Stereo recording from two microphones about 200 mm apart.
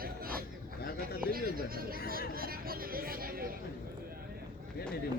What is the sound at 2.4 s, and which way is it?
Speech, 45° right (ahead or behind).